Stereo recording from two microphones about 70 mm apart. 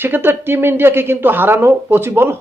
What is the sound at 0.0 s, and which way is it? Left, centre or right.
Speech, right.